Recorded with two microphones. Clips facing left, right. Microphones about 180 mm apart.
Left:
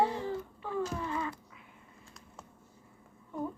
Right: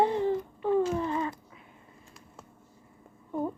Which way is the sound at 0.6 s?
30° right (ahead or behind).